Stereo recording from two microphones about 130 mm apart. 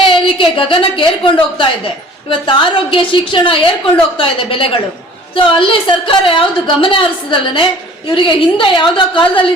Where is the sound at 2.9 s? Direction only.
40° left (ahead or behind).